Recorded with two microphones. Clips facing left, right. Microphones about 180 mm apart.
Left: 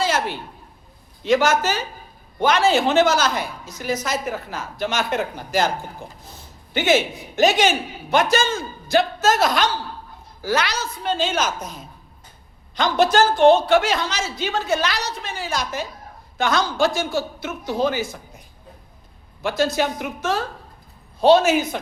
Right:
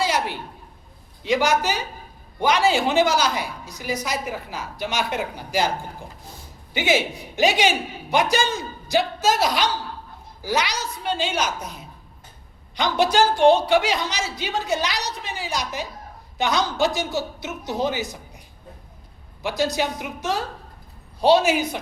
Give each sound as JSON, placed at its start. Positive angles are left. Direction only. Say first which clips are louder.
{"t": 0.0, "sound": "a sound", "louder": "left 1 dB", "side_deg": -15}
{"t": 1.2, "sound": "a woman's voice", "louder": "left 3 dB", "side_deg": -15}
{"t": 9.4, "sound": "a woman's voice", "louder": "left 2 dB", "side_deg": 50}
{"t": 10.4, "sound": "a woman's voice", "louder": "left 2 dB", "side_deg": -15}
{"t": 11.4, "sound": "a woman's voice", "louder": "left 2 dB", "side_deg": 45}
{"t": 12.7, "sound": "a woman's voice", "louder": "left 2 dB", "side_deg": -15}
{"t": 19.4, "sound": "a woman's voice", "louder": "left 2 dB", "side_deg": -15}